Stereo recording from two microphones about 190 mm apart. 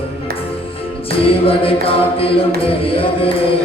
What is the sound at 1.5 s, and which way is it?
A capella, 30° left (ahead or behind).